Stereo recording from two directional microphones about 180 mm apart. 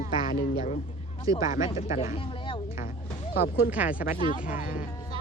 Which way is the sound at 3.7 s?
10° right (ahead or behind).